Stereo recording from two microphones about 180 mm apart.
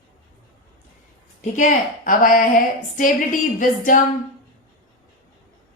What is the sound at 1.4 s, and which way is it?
A woman's voice, 45° left (ahead or behind).